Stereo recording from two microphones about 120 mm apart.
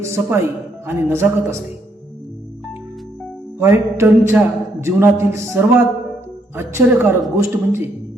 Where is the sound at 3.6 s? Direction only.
20° right (ahead or behind).